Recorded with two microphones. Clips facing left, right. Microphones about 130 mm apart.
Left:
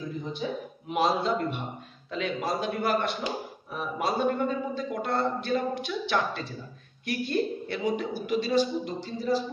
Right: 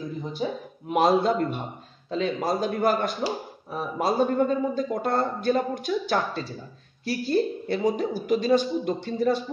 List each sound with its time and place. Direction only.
0.4 s a woman's voice: 40° right (ahead or behind)
0.8 s speech: 50° right (ahead or behind)
2.0 s a woman's voice: 35° right (ahead or behind); by 9.4 s 60° right (ahead or behind)